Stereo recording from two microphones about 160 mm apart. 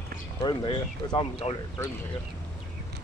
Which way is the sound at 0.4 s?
30° left (ahead or behind).